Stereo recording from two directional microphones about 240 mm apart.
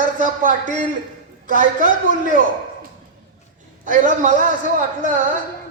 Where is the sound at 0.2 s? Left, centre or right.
Right.